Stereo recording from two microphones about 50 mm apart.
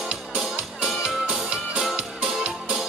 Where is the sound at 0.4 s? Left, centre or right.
Centre.